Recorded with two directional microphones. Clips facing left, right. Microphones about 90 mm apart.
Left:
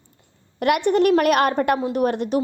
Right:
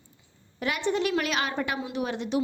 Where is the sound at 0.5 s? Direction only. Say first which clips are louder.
Left 9 dB; 60° left (ahead or behind).